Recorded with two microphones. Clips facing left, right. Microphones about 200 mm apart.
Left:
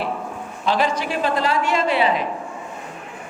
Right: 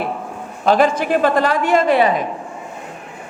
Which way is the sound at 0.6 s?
50° right (ahead or behind).